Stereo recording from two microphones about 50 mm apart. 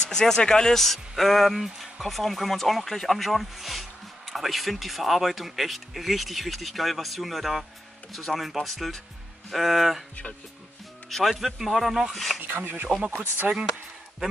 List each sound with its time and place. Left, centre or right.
0.0 s speech: centre
11.1 s speech: centre
12.4 s speech: right
13.4 s speech: centre